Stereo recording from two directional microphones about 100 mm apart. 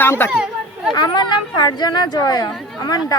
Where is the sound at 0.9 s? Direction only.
45° left (ahead or behind).